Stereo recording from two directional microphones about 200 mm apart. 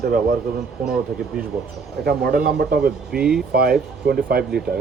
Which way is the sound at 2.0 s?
50° right (ahead or behind).